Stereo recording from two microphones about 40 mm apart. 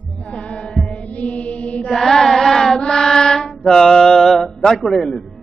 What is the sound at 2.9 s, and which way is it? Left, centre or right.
Mantra, centre.